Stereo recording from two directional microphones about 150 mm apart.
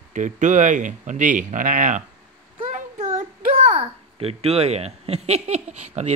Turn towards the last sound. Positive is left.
turn(degrees=-45)  # may be behind; listen again after turning